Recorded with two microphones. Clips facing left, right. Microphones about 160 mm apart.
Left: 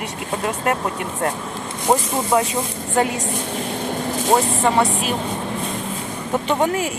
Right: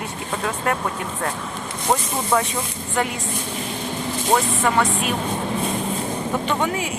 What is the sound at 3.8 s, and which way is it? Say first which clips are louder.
Vehicle: left 3 dB; 50° left (ahead or behind).